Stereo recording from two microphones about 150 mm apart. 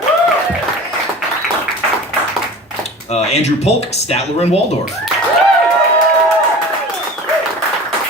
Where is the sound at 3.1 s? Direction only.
45° left (ahead or behind).